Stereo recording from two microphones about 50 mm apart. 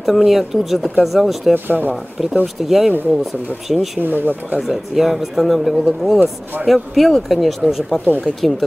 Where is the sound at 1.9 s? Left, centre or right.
Centre.